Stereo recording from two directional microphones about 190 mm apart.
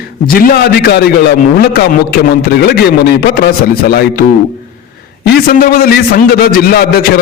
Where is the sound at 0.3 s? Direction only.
55° left (ahead or behind).